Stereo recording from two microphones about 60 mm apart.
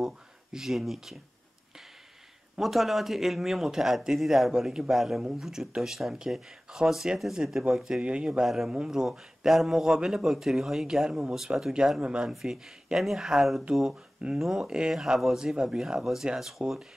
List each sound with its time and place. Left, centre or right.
0.0 s speech: centre
2.5 s speech: centre
8.0 s speech: centre
12.3 s speech: centre